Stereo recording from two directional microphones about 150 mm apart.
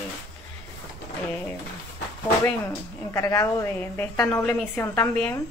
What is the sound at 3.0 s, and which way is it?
Speech, 20° left (ahead or behind).